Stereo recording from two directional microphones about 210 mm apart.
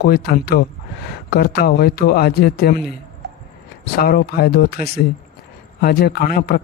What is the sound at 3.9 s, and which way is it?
Speech, 45° left (ahead or behind).